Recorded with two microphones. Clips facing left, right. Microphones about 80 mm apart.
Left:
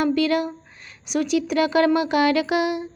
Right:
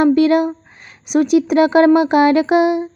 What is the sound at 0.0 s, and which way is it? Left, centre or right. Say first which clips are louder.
Speech: right 8 dB; right.